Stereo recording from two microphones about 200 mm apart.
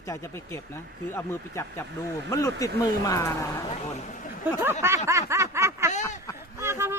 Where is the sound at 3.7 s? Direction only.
35° left (ahead or behind).